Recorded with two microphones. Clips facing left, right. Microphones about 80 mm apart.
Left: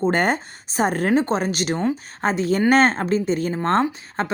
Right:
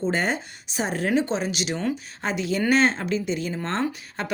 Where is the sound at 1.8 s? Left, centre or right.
Left.